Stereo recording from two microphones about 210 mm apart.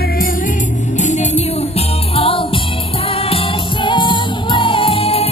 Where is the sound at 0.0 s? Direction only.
45° left (ahead or behind).